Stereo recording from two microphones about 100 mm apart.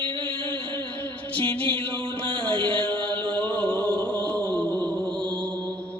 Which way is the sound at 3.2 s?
15° left (ahead or behind).